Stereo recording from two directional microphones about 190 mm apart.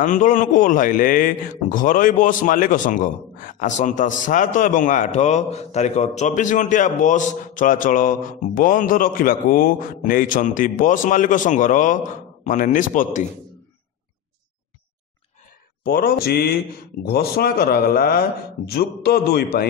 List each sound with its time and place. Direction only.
0.0 s a man's voice: 40° left (ahead or behind)
15.8 s a man's voice: 50° left (ahead or behind)